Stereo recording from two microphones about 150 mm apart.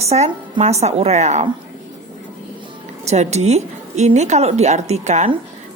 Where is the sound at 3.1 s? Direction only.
45° right (ahead or behind).